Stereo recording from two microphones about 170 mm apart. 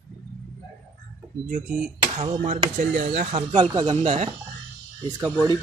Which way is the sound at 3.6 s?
25° right (ahead or behind).